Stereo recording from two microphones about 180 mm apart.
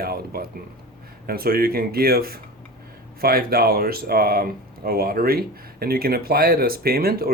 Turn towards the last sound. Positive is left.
turn(degrees=-55)  # may be behind; listen again after turning